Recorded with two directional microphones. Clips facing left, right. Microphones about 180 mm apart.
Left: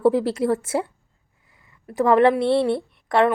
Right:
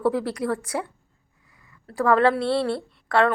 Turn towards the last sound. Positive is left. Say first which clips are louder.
# left 2 dB
turn(degrees=20)  # may be behind; listen again after turning